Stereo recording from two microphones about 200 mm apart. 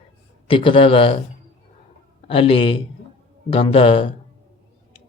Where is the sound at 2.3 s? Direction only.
30° left (ahead or behind).